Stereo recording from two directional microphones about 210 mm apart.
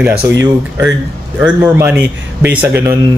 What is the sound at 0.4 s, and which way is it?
Speech, 15° right (ahead or behind).